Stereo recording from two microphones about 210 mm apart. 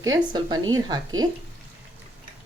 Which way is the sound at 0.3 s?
20° right (ahead or behind).